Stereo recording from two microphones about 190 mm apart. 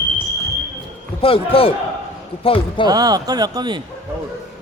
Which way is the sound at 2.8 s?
20° right (ahead or behind).